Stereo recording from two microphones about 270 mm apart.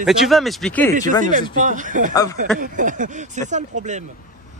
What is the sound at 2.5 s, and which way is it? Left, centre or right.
Speech, right.